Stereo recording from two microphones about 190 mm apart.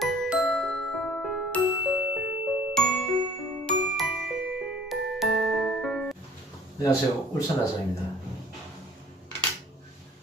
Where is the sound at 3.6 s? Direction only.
Centre (ahead or behind).